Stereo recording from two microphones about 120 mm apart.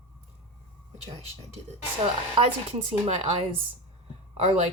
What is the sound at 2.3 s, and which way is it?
Speech, 45° right (ahead or behind).